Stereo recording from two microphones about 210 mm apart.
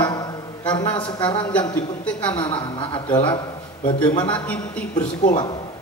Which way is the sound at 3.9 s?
5° left (ahead or behind).